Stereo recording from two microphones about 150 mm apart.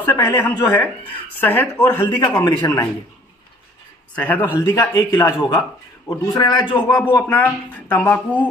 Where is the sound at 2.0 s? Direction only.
25° left (ahead or behind).